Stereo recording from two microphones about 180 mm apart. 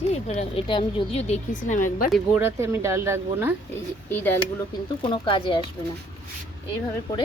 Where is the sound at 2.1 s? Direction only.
10° right (ahead or behind).